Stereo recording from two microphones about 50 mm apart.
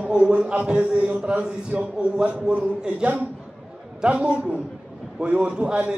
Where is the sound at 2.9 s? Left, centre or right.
Right.